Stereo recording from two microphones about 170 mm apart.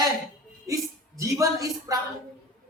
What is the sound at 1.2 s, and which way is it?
Speech, 20° right (ahead or behind).